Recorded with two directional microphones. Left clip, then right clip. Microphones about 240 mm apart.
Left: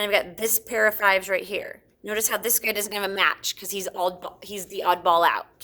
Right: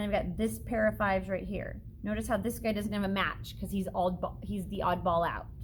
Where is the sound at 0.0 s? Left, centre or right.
Left.